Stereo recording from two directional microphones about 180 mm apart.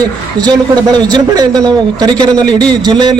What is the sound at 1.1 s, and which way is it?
Speech, 20° right (ahead or behind).